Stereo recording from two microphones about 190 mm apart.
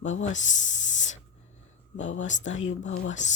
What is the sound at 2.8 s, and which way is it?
Speech, 90° left.